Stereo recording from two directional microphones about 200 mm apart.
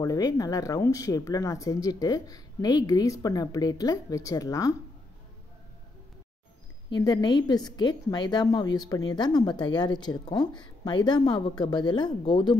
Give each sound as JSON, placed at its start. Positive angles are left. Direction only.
{"t": 0.0, "sound": "speech", "side_deg": 20}
{"t": 6.9, "sound": "a woman's voice", "side_deg": 20}